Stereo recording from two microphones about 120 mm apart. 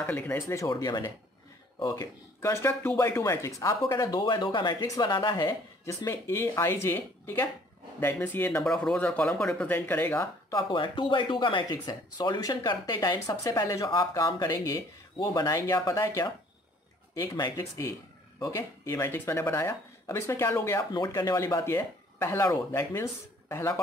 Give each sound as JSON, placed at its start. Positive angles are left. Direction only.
{"t": 0.0, "sound": "speech", "side_deg": 15}
{"t": 10.7, "sound": "speech", "side_deg": 40}
{"t": 17.1, "sound": "speech", "side_deg": 25}